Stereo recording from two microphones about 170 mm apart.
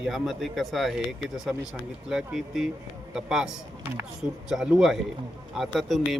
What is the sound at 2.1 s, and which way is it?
Speech, centre (ahead or behind).